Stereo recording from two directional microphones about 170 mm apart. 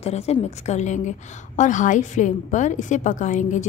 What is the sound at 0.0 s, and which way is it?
A woman's voice, 40° left (ahead or behind).